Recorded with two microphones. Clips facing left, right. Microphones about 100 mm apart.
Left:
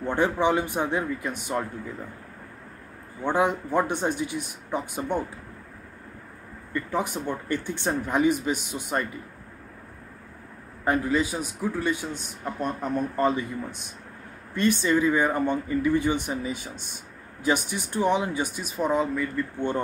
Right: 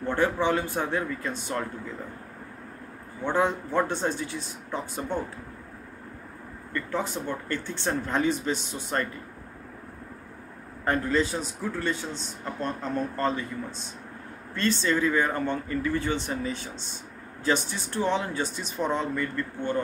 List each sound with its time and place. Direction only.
0.0 s a man's voice: 15° left (ahead or behind)
3.3 s a man's voice: 15° left (ahead or behind)
6.7 s a man's voice: 15° left (ahead or behind)
10.9 s a man's voice: 10° left (ahead or behind)